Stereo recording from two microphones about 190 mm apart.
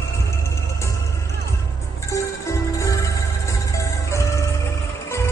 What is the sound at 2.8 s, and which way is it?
Music, 15° left (ahead or behind).